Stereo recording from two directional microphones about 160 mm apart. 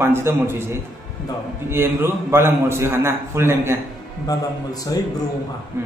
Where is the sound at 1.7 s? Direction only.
15° right (ahead or behind).